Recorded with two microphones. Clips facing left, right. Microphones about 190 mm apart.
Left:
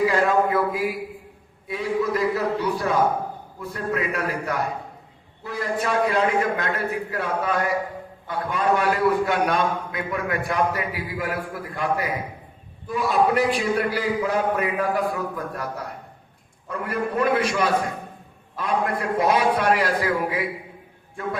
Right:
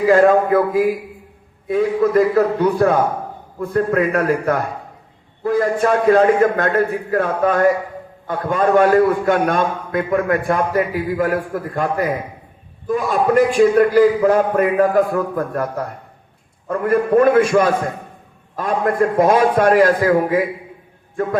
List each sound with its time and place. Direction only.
0.1 s a man's voice: 50° right (ahead or behind)